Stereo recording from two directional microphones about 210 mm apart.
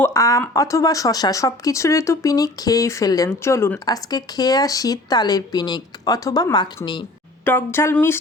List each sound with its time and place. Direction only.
0.0 s speech: 15° left (ahead or behind)
7.4 s speech: 10° left (ahead or behind)